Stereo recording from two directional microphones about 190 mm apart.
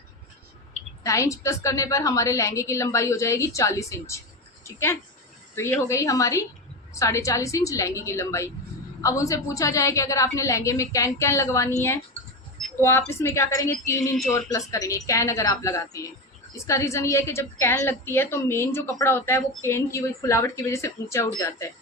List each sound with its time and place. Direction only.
1.0 s a woman's voice: 15° left (ahead or behind)
12.8 s a woman's voice: 15° left (ahead or behind)